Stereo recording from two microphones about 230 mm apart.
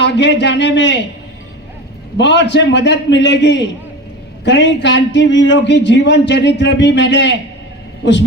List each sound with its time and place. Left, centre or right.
0.0 s speech: left
2.1 s speech: left